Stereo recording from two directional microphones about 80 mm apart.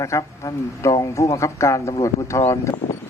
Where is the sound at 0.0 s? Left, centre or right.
Left.